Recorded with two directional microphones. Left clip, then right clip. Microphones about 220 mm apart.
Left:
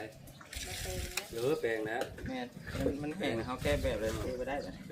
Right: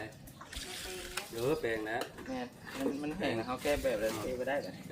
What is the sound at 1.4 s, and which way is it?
Speech, 5° right (ahead or behind).